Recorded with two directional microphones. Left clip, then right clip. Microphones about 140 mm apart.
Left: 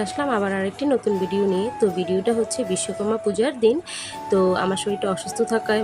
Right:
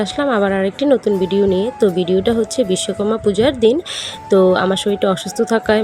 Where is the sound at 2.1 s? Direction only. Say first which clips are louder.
Right 5 dB; 30° right (ahead or behind).